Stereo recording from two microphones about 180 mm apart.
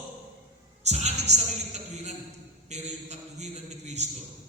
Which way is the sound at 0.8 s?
35° right (ahead or behind).